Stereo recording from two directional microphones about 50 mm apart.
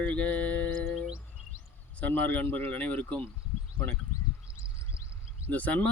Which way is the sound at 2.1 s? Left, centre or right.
Left.